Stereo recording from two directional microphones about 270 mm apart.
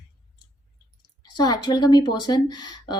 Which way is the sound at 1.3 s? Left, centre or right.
Centre.